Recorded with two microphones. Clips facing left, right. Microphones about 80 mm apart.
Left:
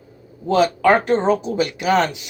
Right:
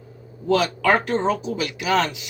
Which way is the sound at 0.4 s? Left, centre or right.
Left.